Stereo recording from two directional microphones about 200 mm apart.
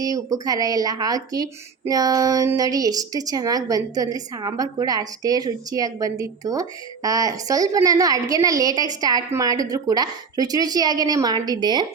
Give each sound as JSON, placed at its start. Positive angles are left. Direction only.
{"t": 0.0, "sound": "speech", "side_deg": -20}